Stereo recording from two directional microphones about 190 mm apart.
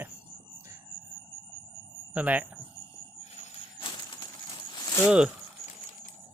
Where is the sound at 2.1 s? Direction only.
5° right (ahead or behind).